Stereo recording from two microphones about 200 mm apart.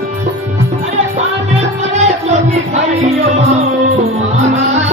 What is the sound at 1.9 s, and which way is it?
Music, 35° right (ahead or behind).